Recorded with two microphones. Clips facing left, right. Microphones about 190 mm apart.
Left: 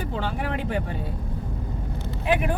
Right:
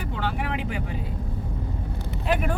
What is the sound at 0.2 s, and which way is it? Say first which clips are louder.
Vehicle: right 1 dB; 60° right (ahead or behind).